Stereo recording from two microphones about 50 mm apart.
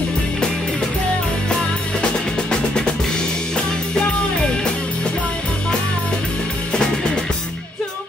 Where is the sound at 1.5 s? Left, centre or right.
Centre.